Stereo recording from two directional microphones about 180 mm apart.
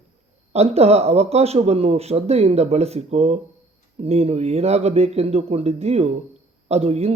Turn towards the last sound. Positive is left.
turn(degrees=-35)  # may be behind; listen again after turning